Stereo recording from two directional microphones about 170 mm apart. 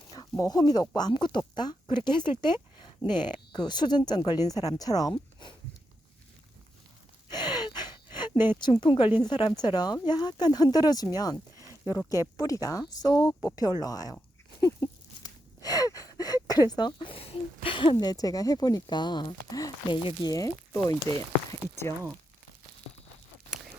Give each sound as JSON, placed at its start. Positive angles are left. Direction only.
{"t": 0.1, "sound": "speech", "side_deg": 20}
{"t": 7.3, "sound": "gasp", "side_deg": 25}
{"t": 8.5, "sound": "speech", "side_deg": 25}
{"t": 14.6, "sound": "a sound", "side_deg": 20}
{"t": 17.9, "sound": "speech", "side_deg": 20}